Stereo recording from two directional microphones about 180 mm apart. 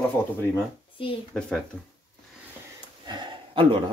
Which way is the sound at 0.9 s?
30° left (ahead or behind).